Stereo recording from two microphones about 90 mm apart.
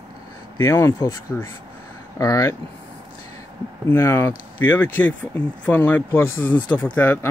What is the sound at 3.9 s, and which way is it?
Speech, 25° left (ahead or behind).